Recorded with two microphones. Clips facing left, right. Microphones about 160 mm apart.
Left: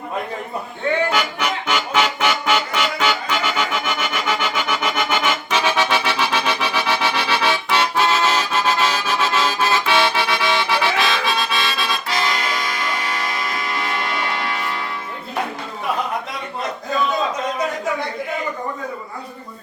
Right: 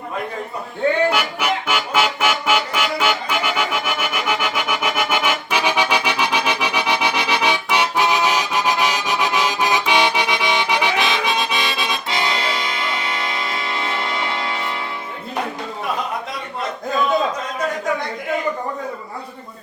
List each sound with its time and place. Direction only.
1.1 s music: 10° right (ahead or behind); by 14.7 s 25° right (ahead or behind)